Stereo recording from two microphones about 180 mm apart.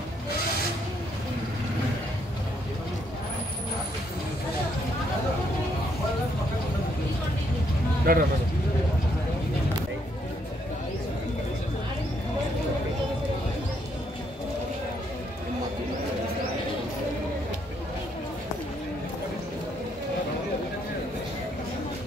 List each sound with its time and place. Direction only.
8.1 s speech: 55° right (ahead or behind)